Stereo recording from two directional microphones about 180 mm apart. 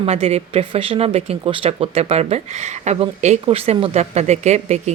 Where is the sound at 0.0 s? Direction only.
35° right (ahead or behind).